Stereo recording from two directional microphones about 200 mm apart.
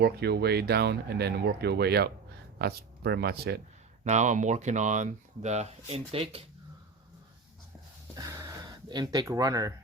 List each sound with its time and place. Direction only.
0.0 s speech: 55° right (ahead or behind)
4.0 s speech: 35° right (ahead or behind)
8.1 s a sound: 15° right (ahead or behind)